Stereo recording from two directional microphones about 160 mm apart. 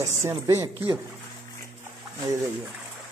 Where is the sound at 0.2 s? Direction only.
15° right (ahead or behind).